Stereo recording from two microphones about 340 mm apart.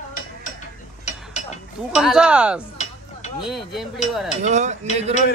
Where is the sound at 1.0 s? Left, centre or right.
Left.